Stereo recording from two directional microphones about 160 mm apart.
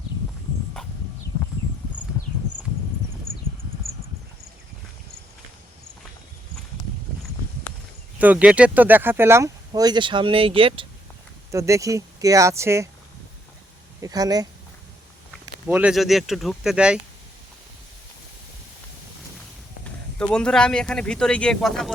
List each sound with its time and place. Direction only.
8.2 s speech: 10° right (ahead or behind); by 10.8 s 35° right (ahead or behind)
11.5 s speech: 20° right (ahead or behind)
14.0 s speech: 25° right (ahead or behind)
15.3 s speech: 10° right (ahead or behind)
20.1 s speech: 5° left (ahead or behind)